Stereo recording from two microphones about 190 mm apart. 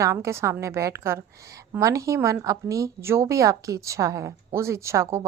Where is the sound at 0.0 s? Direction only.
15° right (ahead or behind).